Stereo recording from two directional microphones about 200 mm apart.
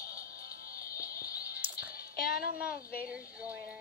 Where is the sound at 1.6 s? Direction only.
10° right (ahead or behind).